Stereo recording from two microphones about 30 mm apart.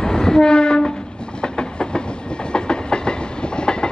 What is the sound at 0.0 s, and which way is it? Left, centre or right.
Train, left.